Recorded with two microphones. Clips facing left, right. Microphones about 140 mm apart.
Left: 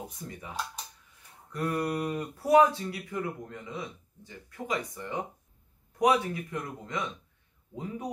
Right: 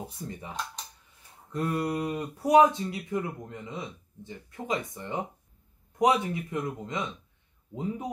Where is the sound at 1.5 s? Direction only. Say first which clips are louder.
Right 1 dB; 25° right (ahead or behind).